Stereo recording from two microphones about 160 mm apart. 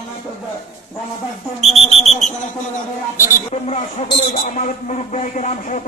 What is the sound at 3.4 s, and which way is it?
A man's voice, 40° left (ahead or behind).